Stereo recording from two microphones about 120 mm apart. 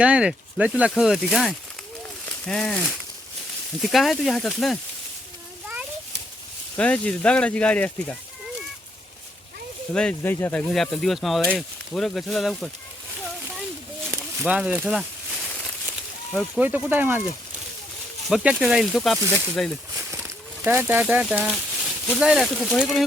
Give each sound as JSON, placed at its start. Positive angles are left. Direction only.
{"t": 0.0, "sound": "speech", "side_deg": -10}
{"t": 6.7, "sound": "speech", "side_deg": 10}
{"t": 9.9, "sound": "speech", "side_deg": 10}
{"t": 10.7, "sound": "speech", "side_deg": 5}
{"t": 13.2, "sound": "a sound", "side_deg": 0}
{"t": 14.4, "sound": "a sound", "side_deg": -10}
{"t": 16.6, "sound": "speech", "side_deg": -15}
{"t": 18.3, "sound": "speech", "side_deg": 0}
{"t": 19.9, "sound": "speech", "side_deg": -15}